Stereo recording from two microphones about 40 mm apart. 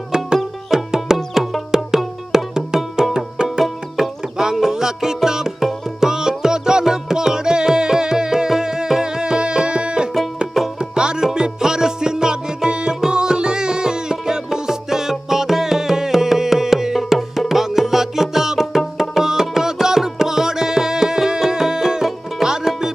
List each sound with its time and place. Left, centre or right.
0.7 s music: centre
4.5 s music: centre